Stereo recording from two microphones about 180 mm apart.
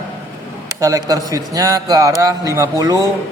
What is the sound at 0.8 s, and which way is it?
A man's voice, 20° right (ahead or behind).